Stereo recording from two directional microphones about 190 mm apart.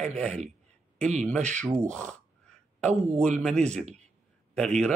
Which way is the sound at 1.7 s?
15° right (ahead or behind).